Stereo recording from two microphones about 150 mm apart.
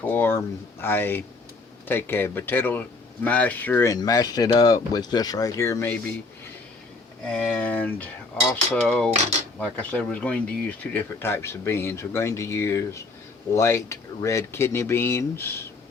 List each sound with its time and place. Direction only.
0.0 s speech: 15° left (ahead or behind)
3.9 s speech: 25° left (ahead or behind)
7.3 s speech: 10° left (ahead or behind)